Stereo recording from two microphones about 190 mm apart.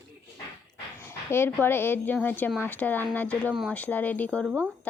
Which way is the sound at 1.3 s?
10° left (ahead or behind).